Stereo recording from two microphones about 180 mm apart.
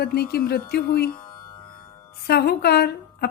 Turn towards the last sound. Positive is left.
turn(degrees=60)  # may be behind; listen again after turning